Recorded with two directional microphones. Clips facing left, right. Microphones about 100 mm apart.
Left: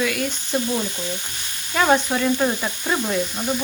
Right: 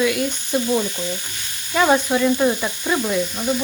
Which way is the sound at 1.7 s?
10° right (ahead or behind).